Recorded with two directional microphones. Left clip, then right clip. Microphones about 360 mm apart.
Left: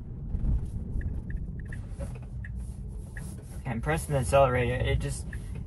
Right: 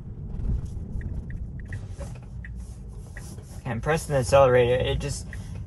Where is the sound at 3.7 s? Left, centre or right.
Right.